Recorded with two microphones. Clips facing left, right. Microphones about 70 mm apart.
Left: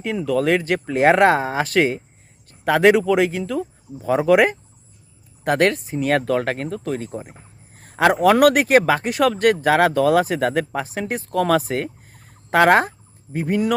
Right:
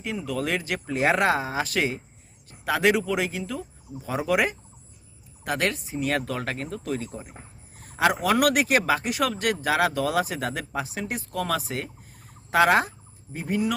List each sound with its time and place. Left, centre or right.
0.3 s speech: left